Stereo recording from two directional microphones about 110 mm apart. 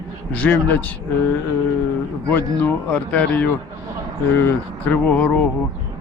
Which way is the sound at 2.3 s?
15° left (ahead or behind).